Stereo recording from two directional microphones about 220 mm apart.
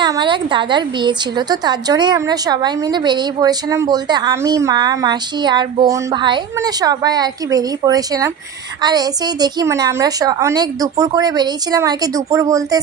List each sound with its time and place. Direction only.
0.0 s a woman's voice: 20° right (ahead or behind)